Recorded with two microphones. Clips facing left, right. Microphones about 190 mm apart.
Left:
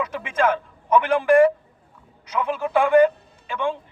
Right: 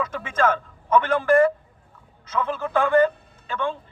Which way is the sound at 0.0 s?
15° left (ahead or behind).